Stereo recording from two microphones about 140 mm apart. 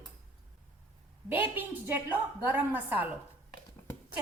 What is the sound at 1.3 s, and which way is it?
A woman's voice, 15° right (ahead or behind).